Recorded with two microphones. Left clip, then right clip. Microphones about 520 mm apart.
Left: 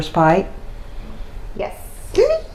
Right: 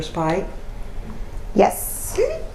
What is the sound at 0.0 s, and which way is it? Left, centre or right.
Speech, left.